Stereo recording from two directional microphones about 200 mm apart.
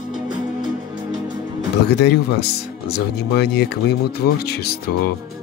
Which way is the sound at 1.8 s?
55° left (ahead or behind).